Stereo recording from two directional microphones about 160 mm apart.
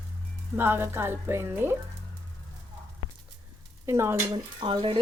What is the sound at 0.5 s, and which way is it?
Speech, 15° right (ahead or behind).